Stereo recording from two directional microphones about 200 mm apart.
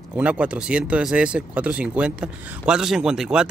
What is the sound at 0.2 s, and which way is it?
Speech, 5° right (ahead or behind).